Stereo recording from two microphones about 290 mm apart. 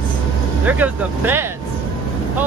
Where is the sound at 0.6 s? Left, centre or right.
Centre.